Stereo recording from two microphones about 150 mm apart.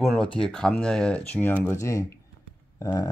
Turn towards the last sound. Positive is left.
turn(degrees=20)  # may be behind; listen again after turning